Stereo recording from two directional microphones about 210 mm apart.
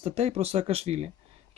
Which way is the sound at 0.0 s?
30° right (ahead or behind).